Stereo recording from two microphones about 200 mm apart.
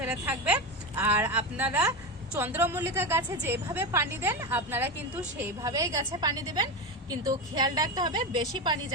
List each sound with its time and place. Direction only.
0.0 s a woman's voice: 5° right (ahead or behind); by 8.8 s 25° right (ahead or behind)